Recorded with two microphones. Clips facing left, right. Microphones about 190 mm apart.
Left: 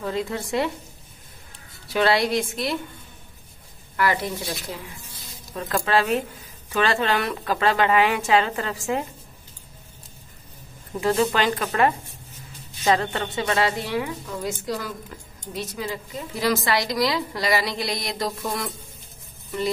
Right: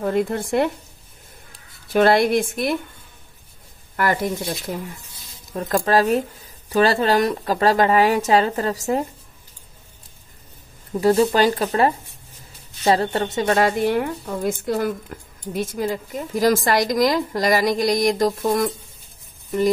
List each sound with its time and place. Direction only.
0.0 s a woman's voice: 55° right (ahead or behind)
1.9 s a woman's voice: 50° right (ahead or behind)
3.9 s speech: 45° right (ahead or behind)
5.5 s speech: 40° right (ahead or behind)
11.0 s a woman's voice: 35° right (ahead or behind)